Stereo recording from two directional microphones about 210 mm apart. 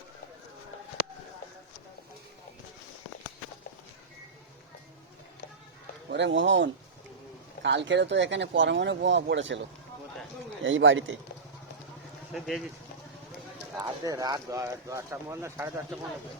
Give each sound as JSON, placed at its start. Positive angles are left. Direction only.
{"t": 6.1, "sound": "speech", "side_deg": -55}
{"t": 12.3, "sound": "speech", "side_deg": 0}
{"t": 13.7, "sound": "speech", "side_deg": -15}